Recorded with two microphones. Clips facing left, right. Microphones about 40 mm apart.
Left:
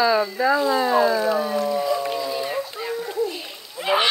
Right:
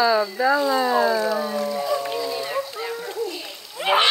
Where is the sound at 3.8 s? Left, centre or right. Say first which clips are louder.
Right 2 dB; right.